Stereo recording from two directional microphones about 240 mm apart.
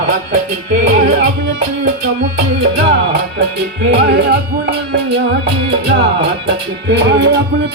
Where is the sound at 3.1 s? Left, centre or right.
Right.